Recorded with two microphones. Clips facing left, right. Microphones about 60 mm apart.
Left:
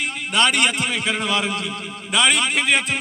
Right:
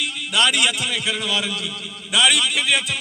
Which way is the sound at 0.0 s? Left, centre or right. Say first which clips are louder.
Left 1 dB; left.